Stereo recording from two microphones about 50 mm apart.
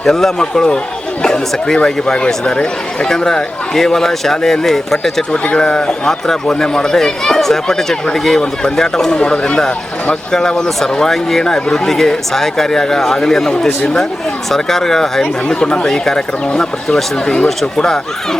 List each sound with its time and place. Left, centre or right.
0.0 s speech: centre
5.3 s speech: centre